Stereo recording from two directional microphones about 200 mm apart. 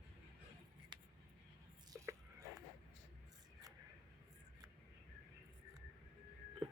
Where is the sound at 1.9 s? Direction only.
15° right (ahead or behind).